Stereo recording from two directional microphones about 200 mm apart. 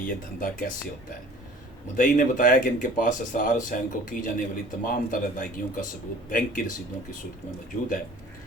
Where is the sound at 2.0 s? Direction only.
40° left (ahead or behind).